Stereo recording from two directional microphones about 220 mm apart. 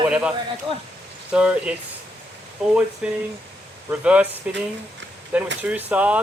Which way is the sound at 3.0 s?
5° right (ahead or behind).